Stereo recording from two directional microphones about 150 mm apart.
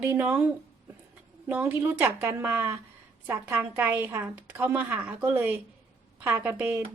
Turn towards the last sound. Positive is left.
turn(degrees=-15)  # may be behind; listen again after turning